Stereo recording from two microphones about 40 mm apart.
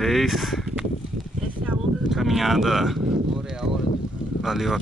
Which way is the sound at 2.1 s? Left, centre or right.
Centre.